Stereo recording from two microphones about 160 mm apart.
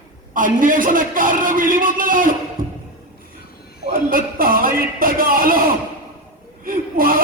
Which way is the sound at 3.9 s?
65° right (ahead or behind).